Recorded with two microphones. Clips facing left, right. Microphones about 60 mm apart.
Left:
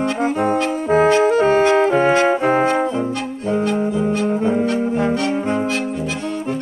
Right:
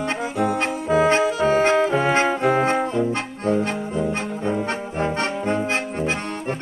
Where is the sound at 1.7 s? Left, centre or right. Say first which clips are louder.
Left 4 dB; left.